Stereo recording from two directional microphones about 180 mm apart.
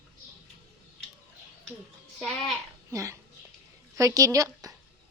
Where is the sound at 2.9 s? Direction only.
15° right (ahead or behind).